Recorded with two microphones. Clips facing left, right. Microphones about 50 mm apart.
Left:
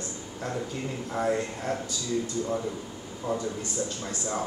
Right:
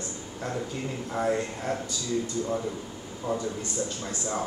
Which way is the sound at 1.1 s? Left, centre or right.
Centre.